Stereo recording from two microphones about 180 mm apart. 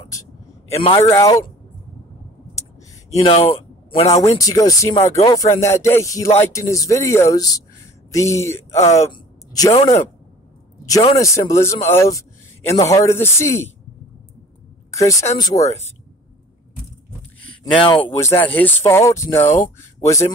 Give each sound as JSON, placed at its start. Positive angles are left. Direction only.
{"t": 0.7, "sound": "speech", "side_deg": 30}
{"t": 1.0, "sound": "a man's voice", "side_deg": 15}
{"t": 3.2, "sound": "speech", "side_deg": 30}
{"t": 4.2, "sound": "a man's voice", "side_deg": 20}
{"t": 10.9, "sound": "a man's voice", "side_deg": 20}
{"t": 15.0, "sound": "a man's voice", "side_deg": 20}
{"t": 17.7, "sound": "speech", "side_deg": 25}
{"t": 18.6, "sound": "a man's voice", "side_deg": 10}